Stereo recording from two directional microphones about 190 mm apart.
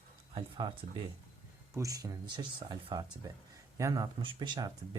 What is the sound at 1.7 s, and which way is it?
Speech, 20° right (ahead or behind).